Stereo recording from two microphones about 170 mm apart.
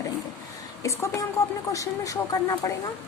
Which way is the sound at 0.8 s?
20° left (ahead or behind).